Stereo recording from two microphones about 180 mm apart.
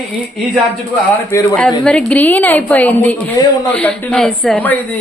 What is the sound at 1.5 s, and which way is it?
A woman's voice, 5° left (ahead or behind).